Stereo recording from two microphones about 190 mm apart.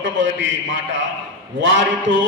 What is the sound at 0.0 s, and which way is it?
Speech, 75° right (ahead or behind).